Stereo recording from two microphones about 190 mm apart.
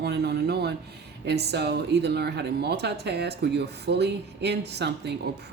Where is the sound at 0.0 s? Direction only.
60° right (ahead or behind).